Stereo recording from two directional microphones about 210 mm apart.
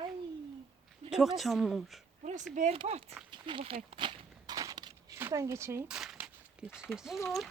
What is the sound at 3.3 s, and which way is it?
Walk, 25° right (ahead or behind).